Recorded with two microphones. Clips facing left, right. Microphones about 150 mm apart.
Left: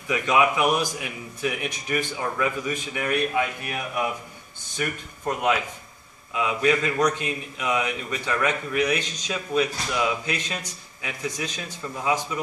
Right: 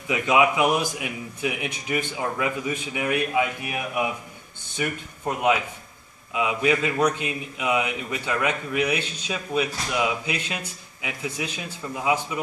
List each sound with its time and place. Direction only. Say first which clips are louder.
0.1 s a man's voice: right 1 dB; 20° right (ahead or behind)